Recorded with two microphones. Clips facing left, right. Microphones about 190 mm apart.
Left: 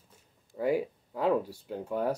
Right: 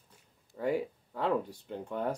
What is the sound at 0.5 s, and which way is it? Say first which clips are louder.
Speech: left 3 dB; 10° left (ahead or behind).